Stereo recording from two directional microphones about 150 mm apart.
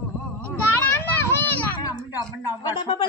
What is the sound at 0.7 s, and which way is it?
Children playing, 15° left (ahead or behind).